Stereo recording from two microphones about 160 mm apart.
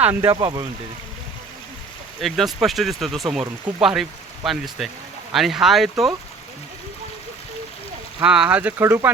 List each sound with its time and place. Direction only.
0.0 s speech: 15° right (ahead or behind)
2.2 s speech: centre (ahead or behind)
8.2 s speech: 5° right (ahead or behind)